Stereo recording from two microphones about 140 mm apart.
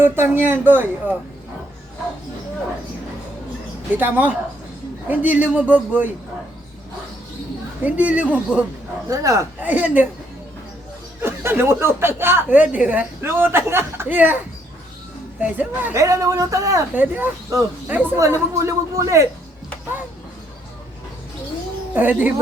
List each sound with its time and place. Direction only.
0.0 s speech: 15° right (ahead or behind)
3.9 s speech: 15° right (ahead or behind)
7.9 s speech: 10° right (ahead or behind)
9.0 s speech: 25° right (ahead or behind)
11.2 s speech: 15° right (ahead or behind)
15.4 s speech: 10° right (ahead or behind)
16.9 s speech: 15° right (ahead or behind)
21.9 s speech: 10° right (ahead or behind)